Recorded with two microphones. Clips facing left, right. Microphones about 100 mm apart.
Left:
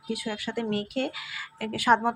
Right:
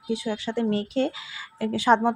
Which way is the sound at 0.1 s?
25° right (ahead or behind).